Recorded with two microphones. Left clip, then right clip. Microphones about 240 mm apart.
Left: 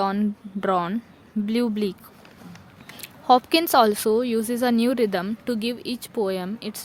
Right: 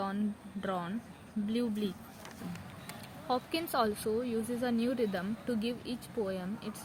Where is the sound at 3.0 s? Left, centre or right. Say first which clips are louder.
Left 17 dB; left.